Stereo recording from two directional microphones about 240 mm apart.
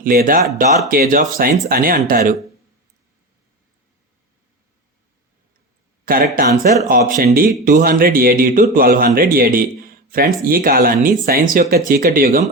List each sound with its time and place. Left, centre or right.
0.0 s speech: right
6.1 s speech: right